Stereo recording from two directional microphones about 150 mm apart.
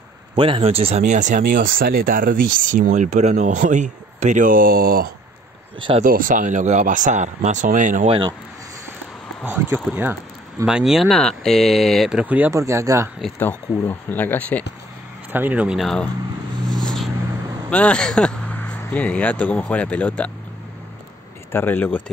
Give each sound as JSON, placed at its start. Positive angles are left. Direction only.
{"t": 0.4, "sound": "speech", "side_deg": -35}
{"t": 9.4, "sound": "speech", "side_deg": -15}
{"t": 13.4, "sound": "speech", "side_deg": 10}
{"t": 15.3, "sound": "speech", "side_deg": -10}
{"t": 16.6, "sound": "vehicle", "side_deg": 5}
{"t": 17.6, "sound": "speech", "side_deg": 5}
{"t": 21.5, "sound": "speech", "side_deg": 15}